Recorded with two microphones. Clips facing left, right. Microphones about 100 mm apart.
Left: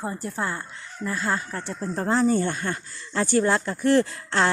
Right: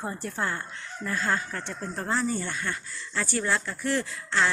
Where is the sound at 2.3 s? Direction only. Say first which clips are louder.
Left 7 dB; 45° left (ahead or behind).